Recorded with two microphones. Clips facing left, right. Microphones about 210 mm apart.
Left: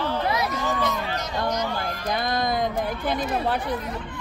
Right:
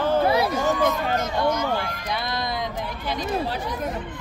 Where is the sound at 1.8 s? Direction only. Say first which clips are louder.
Left 2 dB; 50° left (ahead or behind).